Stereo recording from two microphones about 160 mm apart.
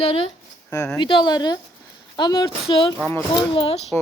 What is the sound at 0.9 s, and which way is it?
Speech, 30° left (ahead or behind).